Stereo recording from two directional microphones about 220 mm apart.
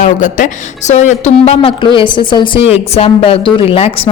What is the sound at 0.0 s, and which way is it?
A woman's voice, 35° left (ahead or behind).